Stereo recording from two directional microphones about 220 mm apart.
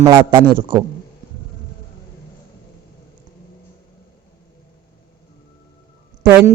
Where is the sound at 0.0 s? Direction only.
10° right (ahead or behind).